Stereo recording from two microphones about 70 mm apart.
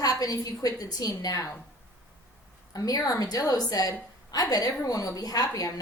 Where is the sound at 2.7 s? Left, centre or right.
Left.